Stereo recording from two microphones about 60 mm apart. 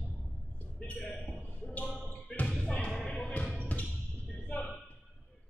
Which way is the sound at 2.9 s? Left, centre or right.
Centre.